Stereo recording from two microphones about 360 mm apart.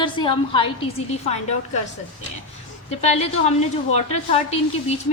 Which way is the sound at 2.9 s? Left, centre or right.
Centre.